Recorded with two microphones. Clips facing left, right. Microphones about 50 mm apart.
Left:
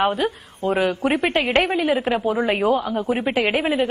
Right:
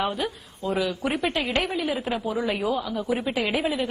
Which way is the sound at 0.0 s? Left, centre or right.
Left.